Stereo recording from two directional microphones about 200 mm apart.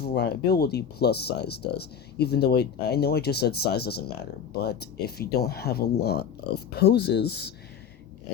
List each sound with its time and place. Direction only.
0.0 s speech: 55° left (ahead or behind)